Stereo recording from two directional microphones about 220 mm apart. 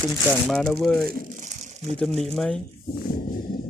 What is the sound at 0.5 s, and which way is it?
Speech, 5° left (ahead or behind).